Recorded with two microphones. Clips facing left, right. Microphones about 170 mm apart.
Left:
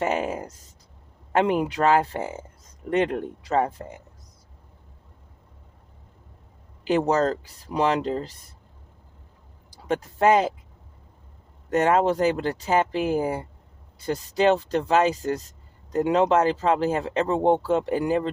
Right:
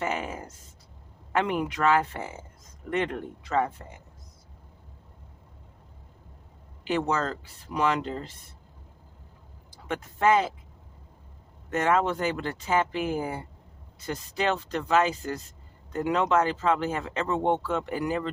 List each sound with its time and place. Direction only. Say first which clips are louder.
0.0 s a sound: left 6 dB; 35° left (ahead or behind)
1.3 s speech: left 5 dB; 35° left (ahead or behind)
6.8 s speech: left 6 dB; 35° left (ahead or behind)
9.6 s speech: left 7 dB; 35° left (ahead or behind)
11.7 s speech: left 5 dB; 35° left (ahead or behind)